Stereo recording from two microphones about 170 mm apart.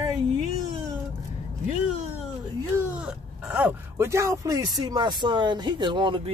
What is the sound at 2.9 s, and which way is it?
Speech, 10° right (ahead or behind).